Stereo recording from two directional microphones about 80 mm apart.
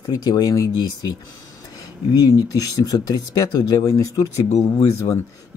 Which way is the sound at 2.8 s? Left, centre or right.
Left.